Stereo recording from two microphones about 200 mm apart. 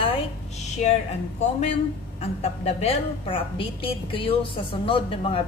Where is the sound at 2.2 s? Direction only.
30° left (ahead or behind).